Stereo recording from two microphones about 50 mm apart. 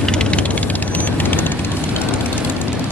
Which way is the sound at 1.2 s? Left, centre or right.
Left.